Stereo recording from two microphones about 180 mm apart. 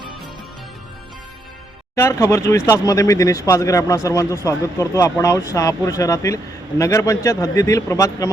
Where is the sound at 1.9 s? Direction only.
15° left (ahead or behind).